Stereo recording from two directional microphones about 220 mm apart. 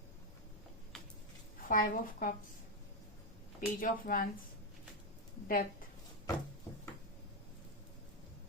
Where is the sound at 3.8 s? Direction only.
35° left (ahead or behind).